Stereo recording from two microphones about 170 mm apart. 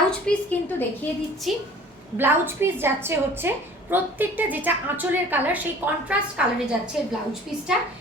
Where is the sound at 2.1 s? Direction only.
15° right (ahead or behind).